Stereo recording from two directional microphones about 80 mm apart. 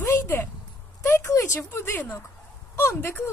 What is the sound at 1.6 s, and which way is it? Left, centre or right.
Speech, left.